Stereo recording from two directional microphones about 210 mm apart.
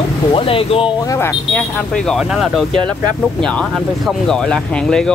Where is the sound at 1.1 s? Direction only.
10° left (ahead or behind).